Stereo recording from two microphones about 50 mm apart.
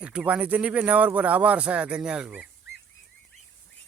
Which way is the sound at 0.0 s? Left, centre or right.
Right.